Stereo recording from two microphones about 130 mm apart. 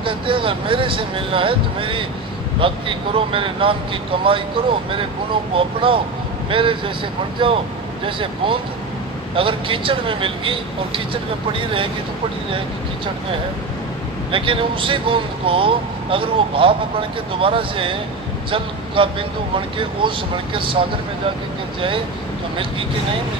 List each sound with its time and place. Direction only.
0.0 s speech: 40° right (ahead or behind)